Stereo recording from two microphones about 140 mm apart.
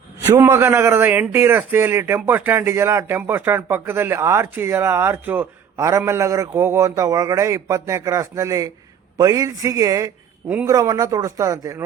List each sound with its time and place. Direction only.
0.2 s a man's voice: 15° right (ahead or behind)